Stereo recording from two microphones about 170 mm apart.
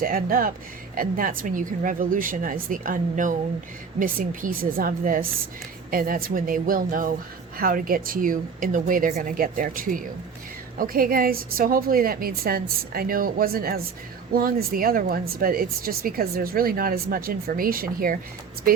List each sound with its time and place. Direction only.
0.0 s speech: 60° right (ahead or behind)